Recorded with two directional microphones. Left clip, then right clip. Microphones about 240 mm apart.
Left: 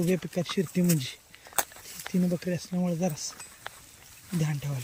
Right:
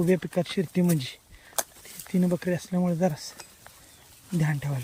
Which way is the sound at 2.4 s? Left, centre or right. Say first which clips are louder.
Right 4 dB; centre.